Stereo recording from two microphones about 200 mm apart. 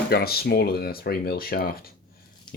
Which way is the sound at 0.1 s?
50° left (ahead or behind).